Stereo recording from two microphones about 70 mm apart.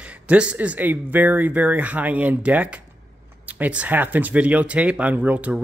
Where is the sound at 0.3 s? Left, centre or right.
Centre.